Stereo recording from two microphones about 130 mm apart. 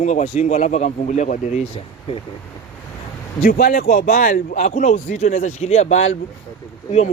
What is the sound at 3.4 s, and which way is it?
Speech, 90° left.